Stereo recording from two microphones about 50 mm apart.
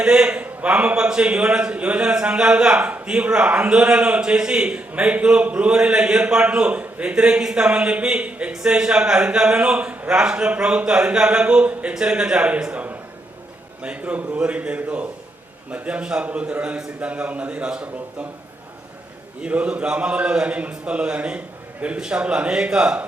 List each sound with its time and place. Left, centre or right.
0.0 s a man's voice: centre
13.8 s a man's voice: right
19.4 s a man's voice: right